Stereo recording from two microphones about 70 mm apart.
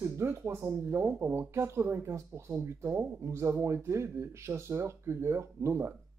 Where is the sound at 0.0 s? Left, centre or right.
Right.